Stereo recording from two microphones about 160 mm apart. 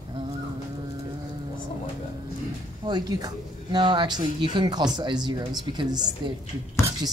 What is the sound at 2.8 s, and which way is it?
Speech, 25° right (ahead or behind).